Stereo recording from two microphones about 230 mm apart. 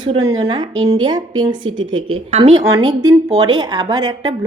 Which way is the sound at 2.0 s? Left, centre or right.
Right.